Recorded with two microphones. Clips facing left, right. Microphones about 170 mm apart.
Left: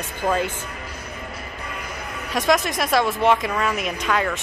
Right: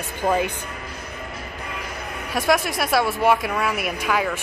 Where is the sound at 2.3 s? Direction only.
5° right (ahead or behind).